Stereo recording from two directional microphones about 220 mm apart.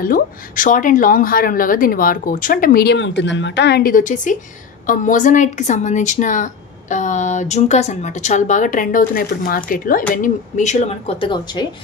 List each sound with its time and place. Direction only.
0.0 s speech: 40° left (ahead or behind); by 11.6 s 20° left (ahead or behind)